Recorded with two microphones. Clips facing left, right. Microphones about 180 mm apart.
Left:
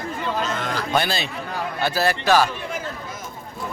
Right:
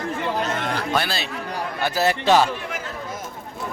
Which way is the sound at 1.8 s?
20° right (ahead or behind).